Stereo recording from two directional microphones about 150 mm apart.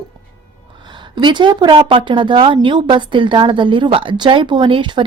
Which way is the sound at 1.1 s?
30° right (ahead or behind).